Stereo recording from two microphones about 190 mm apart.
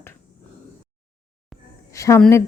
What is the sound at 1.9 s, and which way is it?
Speech, 15° left (ahead or behind).